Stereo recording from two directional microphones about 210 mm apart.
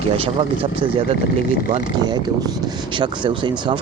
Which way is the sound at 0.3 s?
25° right (ahead or behind).